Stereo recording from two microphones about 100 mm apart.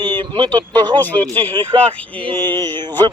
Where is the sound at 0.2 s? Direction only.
45° right (ahead or behind).